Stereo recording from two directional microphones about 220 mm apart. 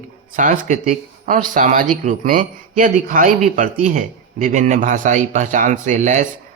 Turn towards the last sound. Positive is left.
turn(degrees=-35)  # may be behind; listen again after turning